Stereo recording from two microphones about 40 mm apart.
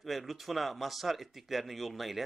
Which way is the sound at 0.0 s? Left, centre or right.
Centre.